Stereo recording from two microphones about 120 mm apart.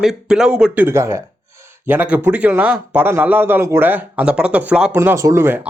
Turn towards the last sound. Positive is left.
turn(degrees=-20)  # may be behind; listen again after turning